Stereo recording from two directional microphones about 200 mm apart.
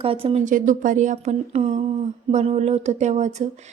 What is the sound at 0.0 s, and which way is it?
A woman's voice, 25° right (ahead or behind).